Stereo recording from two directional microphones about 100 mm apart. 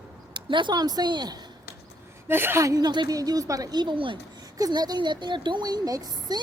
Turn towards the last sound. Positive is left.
turn(degrees=-40)  # may be behind; listen again after turning